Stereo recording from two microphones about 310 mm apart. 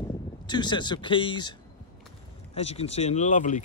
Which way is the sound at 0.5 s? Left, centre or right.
Centre.